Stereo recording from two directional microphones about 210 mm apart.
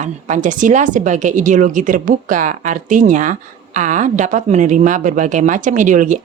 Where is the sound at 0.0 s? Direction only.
35° right (ahead or behind).